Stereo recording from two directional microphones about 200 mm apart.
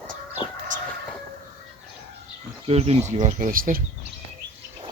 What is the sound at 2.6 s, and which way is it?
Speech, 30° right (ahead or behind).